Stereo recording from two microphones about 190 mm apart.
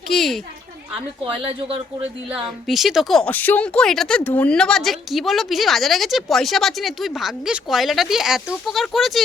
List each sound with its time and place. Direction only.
0.1 s a woman's voice: centre (ahead or behind)
1.2 s speech: 30° right (ahead or behind)
2.3 s a woman's voice: centre (ahead or behind)